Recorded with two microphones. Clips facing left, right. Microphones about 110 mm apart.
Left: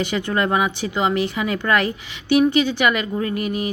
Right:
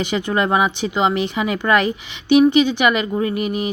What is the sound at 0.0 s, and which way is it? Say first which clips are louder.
Speech: right 2 dB; 20° right (ahead or behind).